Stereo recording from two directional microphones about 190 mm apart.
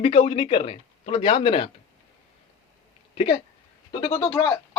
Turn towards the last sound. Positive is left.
turn(degrees=15)  # may be behind; listen again after turning